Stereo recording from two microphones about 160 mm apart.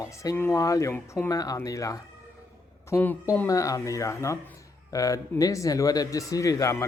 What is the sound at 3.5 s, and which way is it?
A man's voice, 20° left (ahead or behind).